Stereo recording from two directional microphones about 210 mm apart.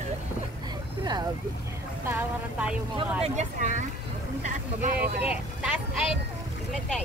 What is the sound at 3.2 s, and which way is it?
Speech, 35° right (ahead or behind).